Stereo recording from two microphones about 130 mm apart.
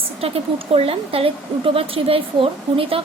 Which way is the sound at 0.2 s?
45° right (ahead or behind).